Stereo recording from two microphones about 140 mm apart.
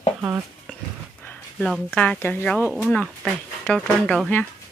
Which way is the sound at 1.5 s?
Centre (ahead or behind).